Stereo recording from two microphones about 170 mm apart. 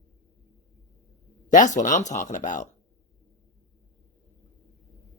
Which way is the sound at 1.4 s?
50° left (ahead or behind).